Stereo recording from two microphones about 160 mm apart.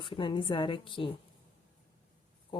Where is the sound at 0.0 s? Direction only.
30° left (ahead or behind).